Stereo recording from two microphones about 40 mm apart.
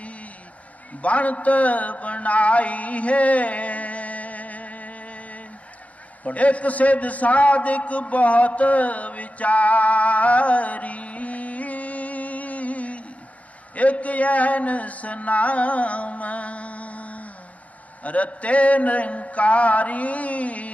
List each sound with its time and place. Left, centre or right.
0.0 s a sound: left
1.0 s mantra: left
6.2 s a man's voice: left
13.7 s mantra: left